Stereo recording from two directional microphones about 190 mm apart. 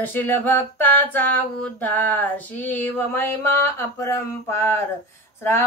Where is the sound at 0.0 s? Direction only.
10° left (ahead or behind).